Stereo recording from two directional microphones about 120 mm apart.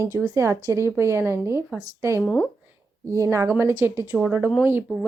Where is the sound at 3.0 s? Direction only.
25° right (ahead or behind).